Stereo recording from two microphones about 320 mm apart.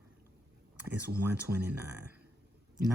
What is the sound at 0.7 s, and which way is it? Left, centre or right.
Speech, centre.